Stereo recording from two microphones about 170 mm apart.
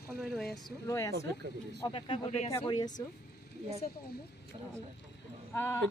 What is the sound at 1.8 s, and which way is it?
Speech, 30° left (ahead or behind).